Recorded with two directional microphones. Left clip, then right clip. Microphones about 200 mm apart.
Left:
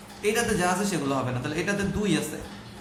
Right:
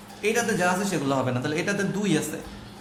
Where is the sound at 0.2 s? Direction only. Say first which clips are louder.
Right 1 dB; 30° right (ahead or behind).